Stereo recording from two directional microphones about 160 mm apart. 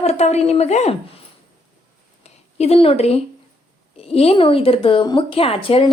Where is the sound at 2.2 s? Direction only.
40° left (ahead or behind).